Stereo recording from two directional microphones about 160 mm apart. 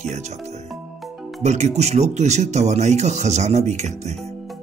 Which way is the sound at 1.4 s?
45° right (ahead or behind).